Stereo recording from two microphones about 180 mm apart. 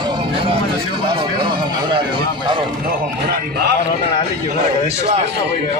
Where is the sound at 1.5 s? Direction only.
25° right (ahead or behind).